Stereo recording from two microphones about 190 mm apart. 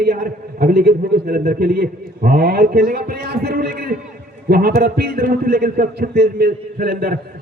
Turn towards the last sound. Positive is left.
turn(degrees=-50)  # may be behind; listen again after turning